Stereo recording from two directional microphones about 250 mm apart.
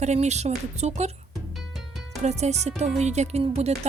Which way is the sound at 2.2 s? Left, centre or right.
Right.